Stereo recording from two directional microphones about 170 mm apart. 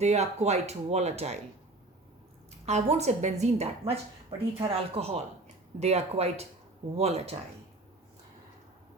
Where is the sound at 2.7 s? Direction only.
40° right (ahead or behind).